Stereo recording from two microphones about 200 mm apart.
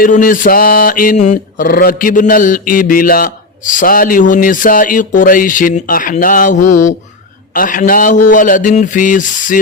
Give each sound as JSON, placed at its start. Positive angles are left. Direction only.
{"t": 0.0, "sound": "mantra", "side_deg": 40}
{"t": 7.5, "sound": "a man's voice", "side_deg": 40}